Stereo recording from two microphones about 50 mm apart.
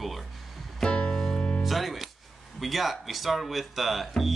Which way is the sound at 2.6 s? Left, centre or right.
Centre.